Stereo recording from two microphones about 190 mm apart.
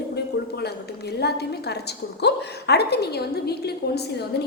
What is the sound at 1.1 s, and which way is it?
A woman's voice, 60° left (ahead or behind).